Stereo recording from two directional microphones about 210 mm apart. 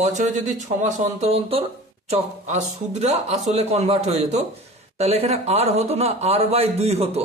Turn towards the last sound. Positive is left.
turn(degrees=-30)  # may be behind; listen again after turning